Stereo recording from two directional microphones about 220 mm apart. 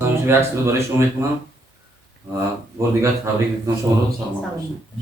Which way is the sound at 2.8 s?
15° right (ahead or behind).